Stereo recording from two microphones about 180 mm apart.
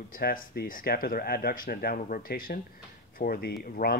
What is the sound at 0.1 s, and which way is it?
Speech, 55° left (ahead or behind).